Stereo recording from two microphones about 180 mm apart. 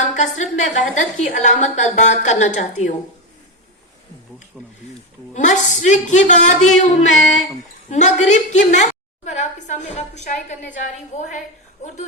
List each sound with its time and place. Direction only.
0.0 s a woman's voice: 45° left (ahead or behind)
5.3 s a man's voice: 40° left (ahead or behind)